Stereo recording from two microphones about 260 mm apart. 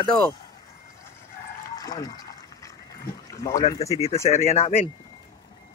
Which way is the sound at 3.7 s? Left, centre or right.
Left.